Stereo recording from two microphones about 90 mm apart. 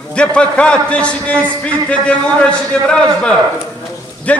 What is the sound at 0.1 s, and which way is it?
A man's voice, 10° left (ahead or behind).